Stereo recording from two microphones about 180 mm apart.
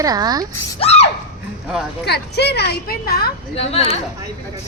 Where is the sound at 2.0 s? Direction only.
65° left (ahead or behind).